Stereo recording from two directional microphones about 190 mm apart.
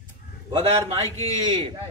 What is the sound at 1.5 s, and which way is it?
Speech, 25° right (ahead or behind).